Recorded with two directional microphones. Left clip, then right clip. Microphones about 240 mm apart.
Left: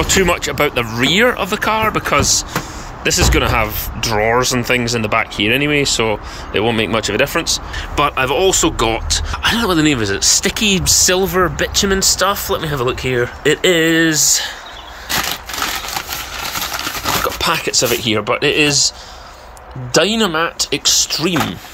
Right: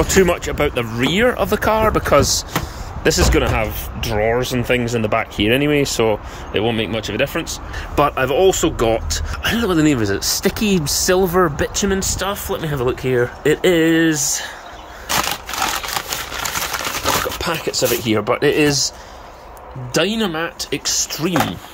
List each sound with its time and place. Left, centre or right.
0.0 s speech: centre
17.4 s speech: centre
19.9 s speech: centre